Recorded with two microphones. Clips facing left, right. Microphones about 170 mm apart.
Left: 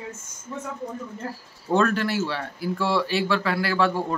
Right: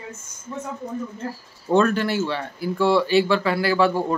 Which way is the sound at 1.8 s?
Centre (ahead or behind).